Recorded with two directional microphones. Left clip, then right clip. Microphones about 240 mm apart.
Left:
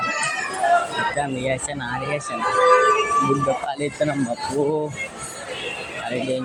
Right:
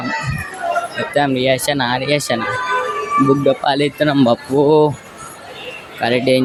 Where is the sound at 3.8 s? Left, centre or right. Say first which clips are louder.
Right 7 dB; right.